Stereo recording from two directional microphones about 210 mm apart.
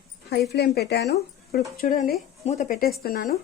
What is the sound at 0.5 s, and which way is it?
A woman's voice, 50° left (ahead or behind).